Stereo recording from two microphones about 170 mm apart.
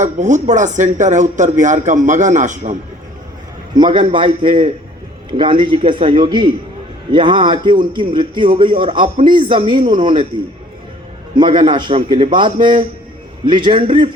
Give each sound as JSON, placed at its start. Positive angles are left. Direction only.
{"t": 0.0, "sound": "speech", "side_deg": -45}
{"t": 3.8, "sound": "a man's voice", "side_deg": -30}
{"t": 11.3, "sound": "a man's voice", "side_deg": -30}